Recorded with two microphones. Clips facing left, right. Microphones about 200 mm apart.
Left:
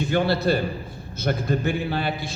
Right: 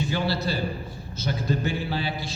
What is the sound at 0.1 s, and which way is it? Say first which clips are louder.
A man's voice: left 6 dB; 55° left (ahead or behind).